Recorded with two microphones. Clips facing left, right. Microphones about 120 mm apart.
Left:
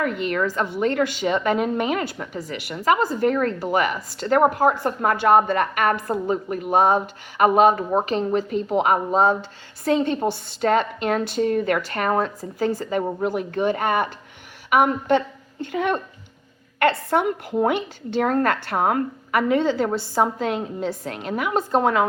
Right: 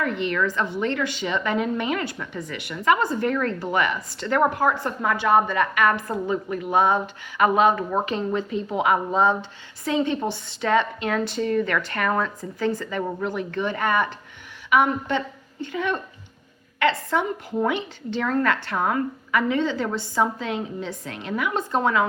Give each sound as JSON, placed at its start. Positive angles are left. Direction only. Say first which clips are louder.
{"t": 0.0, "sound": "a woman's voice", "louder": "left 1 dB", "side_deg": 50}